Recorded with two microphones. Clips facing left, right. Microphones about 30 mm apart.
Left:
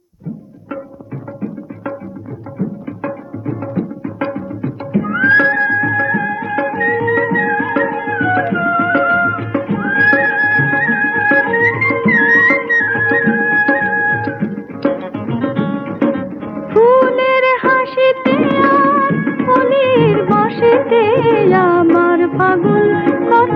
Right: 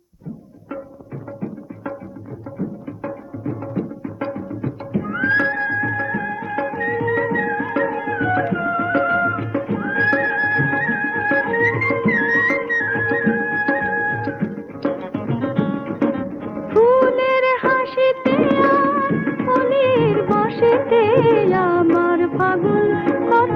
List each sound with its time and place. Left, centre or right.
3.0 s music: left
15.1 s music: centre